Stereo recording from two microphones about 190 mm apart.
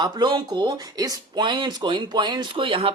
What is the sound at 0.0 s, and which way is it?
Speech, 25° right (ahead or behind).